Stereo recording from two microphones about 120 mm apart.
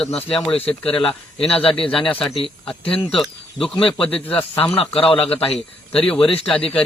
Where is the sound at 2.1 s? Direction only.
5° left (ahead or behind).